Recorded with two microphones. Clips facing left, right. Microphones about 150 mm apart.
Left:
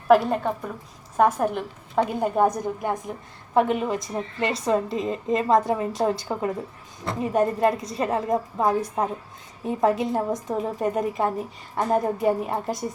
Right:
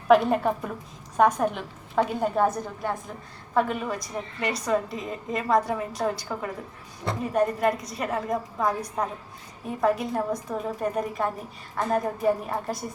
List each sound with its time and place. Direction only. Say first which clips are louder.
0.3 s a woman's voice: right 1 dB; 5° right (ahead or behind)
1.1 s a woman's voice: left 1 dB; 5° left (ahead or behind); by 12.7 s 25° left (ahead or behind)